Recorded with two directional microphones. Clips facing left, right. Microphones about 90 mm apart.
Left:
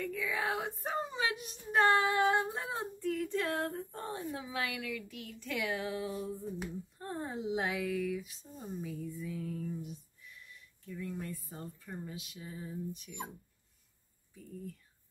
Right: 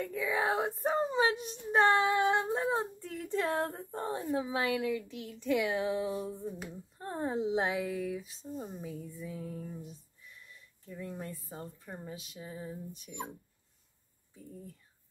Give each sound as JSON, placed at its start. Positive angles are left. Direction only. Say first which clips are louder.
{"t": 0.0, "sound": "speech", "louder": "right 3 dB", "side_deg": -30}